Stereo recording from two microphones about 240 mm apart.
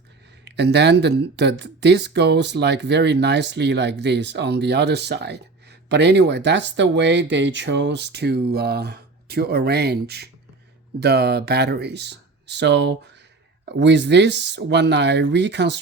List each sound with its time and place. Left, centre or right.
0.4 s speech: right